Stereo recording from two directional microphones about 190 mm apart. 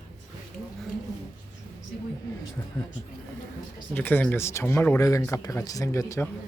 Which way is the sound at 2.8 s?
20° left (ahead or behind).